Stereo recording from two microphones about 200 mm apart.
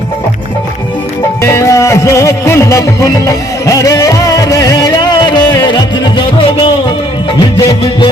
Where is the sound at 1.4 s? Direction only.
15° left (ahead or behind).